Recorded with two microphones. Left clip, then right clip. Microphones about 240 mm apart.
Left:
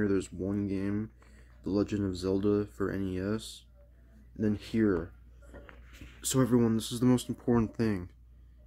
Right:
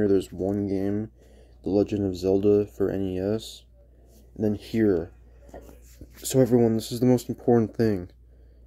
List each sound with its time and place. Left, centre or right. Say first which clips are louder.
0.0 s speech: right 8 dB; centre
6.2 s speech: right 7 dB; centre